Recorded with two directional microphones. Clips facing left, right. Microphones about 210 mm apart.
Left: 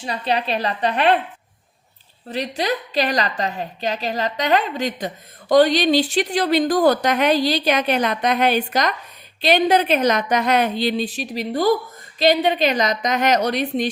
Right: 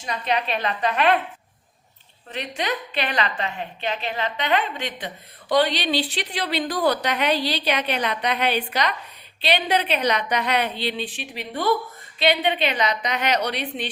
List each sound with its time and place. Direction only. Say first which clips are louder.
0.0 s a woman's voice: left 2 dB; 30° left (ahead or behind)
2.3 s a woman's voice: left 5 dB; 35° left (ahead or behind)